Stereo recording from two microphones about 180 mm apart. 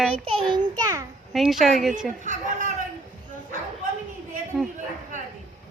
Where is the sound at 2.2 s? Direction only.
45° right (ahead or behind).